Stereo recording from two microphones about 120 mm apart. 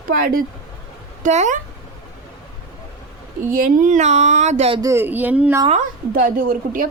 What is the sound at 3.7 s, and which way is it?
Speech, 90° right.